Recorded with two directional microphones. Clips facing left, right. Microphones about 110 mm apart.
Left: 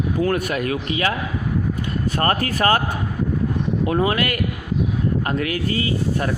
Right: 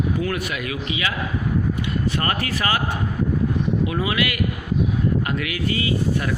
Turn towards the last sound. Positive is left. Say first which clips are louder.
# even
turn(degrees=35)  # may be behind; listen again after turning